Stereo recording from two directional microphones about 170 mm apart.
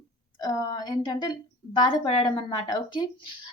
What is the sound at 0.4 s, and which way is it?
A woman's voice, 25° left (ahead or behind).